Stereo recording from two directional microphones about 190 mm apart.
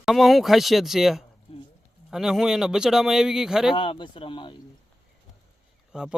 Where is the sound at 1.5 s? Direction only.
30° left (ahead or behind).